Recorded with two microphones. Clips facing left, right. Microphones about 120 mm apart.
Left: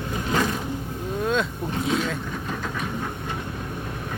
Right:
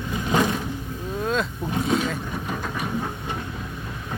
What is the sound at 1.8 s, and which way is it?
Vehicle, centre (ahead or behind).